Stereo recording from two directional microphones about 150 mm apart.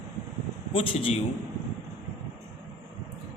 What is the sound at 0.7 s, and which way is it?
Speech, 40° left (ahead or behind).